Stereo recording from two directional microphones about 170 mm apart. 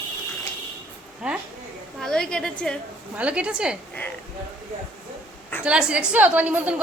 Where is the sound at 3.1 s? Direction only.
5° right (ahead or behind).